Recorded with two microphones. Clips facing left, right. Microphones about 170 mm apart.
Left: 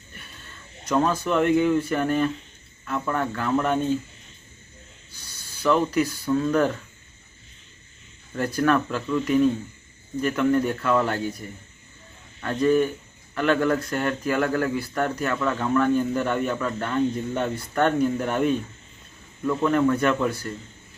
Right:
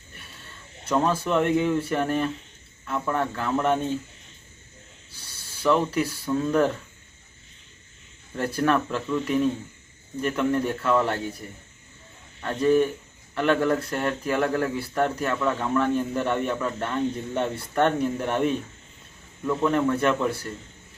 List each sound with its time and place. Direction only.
0.9 s speech: 5° right (ahead or behind)
5.6 s speech: centre (ahead or behind)
8.4 s speech: 5° right (ahead or behind)